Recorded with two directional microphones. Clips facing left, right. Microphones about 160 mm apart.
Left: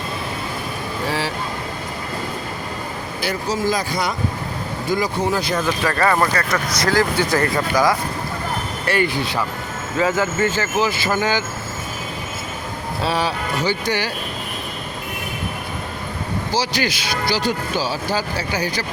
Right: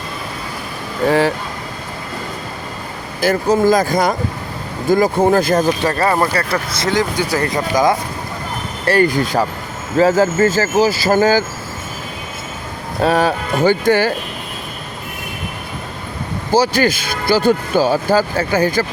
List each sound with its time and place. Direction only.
3.2 s speech: 50° right (ahead or behind)
5.8 s speech: 25° right (ahead or behind)
7.2 s speech: 10° right (ahead or behind)
8.9 s speech: 40° right (ahead or behind)
13.0 s speech: 50° right (ahead or behind)
16.5 s speech: 50° right (ahead or behind)